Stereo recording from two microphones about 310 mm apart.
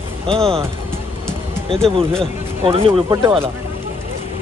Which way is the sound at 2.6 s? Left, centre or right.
Centre.